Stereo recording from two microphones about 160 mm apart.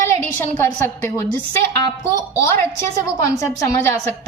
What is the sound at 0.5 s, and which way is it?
Speech, 15° left (ahead or behind).